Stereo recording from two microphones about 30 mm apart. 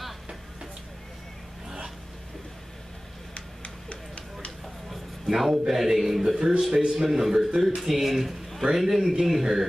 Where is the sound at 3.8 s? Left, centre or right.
Left.